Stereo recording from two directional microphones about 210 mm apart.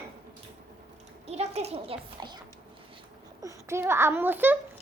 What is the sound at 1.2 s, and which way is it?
A child's voice, 30° right (ahead or behind).